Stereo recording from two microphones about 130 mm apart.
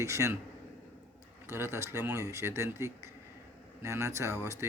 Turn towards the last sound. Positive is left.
turn(degrees=-20)  # may be behind; listen again after turning